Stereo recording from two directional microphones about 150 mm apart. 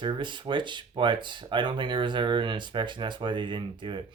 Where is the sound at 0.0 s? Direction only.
30° right (ahead or behind).